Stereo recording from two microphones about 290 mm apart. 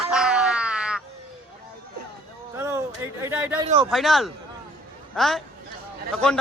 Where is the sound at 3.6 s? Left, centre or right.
Centre.